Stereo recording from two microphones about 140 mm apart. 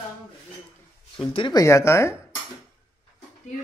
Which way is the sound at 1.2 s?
35° left (ahead or behind).